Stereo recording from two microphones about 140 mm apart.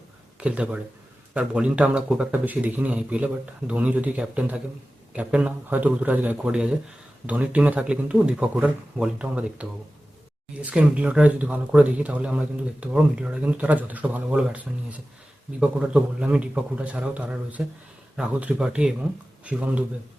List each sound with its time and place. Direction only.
0.3 s speech: 10° right (ahead or behind)